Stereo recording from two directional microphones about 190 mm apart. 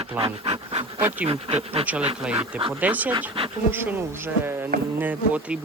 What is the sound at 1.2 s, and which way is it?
Speech, 30° right (ahead or behind).